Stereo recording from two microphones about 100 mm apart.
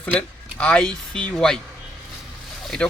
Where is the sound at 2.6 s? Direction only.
Centre (ahead or behind).